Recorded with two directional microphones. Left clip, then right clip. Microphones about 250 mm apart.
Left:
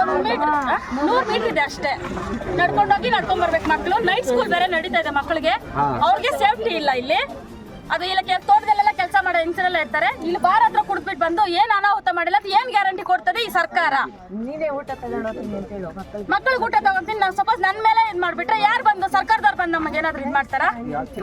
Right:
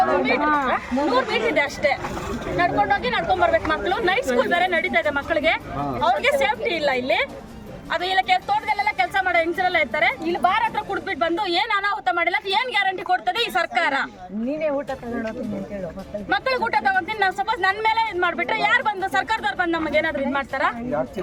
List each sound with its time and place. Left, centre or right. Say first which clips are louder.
0.4 s a sound: left 1 dB; right
0.7 s a woman's voice: left 1 dB; centre
16.3 s speech: left 3 dB; centre